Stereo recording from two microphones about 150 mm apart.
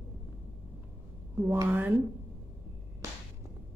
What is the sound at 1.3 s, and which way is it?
Speech, 20° right (ahead or behind).